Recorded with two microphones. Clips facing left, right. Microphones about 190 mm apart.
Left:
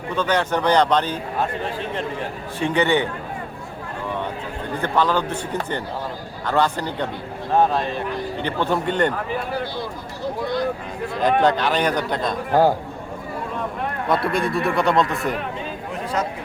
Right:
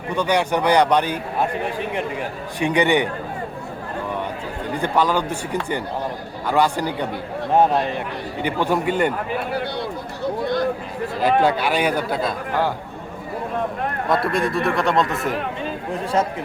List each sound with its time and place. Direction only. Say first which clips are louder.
0.1 s a man's voice: right 1 dB; 15° right (ahead or behind)
4.7 s a man's voice: right 1 dB; 15° right (ahead or behind)
11.2 s a man's voice: even; 10° right (ahead or behind)
14.3 s speech: right 1 dB; centre (ahead or behind)
16.2 s speech: right 4 dB; 30° right (ahead or behind)